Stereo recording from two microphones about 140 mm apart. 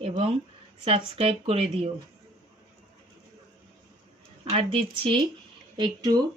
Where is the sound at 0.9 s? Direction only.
45° right (ahead or behind).